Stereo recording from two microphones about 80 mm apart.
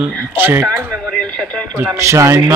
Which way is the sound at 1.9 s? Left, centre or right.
Right.